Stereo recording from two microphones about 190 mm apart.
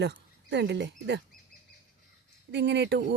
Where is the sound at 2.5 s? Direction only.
65° right (ahead or behind).